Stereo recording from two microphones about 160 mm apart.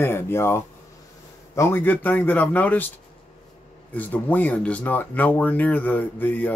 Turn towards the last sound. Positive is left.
turn(degrees=10)  # may be behind; listen again after turning